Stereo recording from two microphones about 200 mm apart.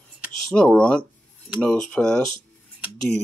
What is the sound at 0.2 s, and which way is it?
Speech, 5° left (ahead or behind).